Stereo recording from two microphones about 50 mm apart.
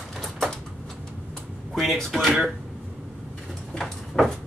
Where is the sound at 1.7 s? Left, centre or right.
Centre.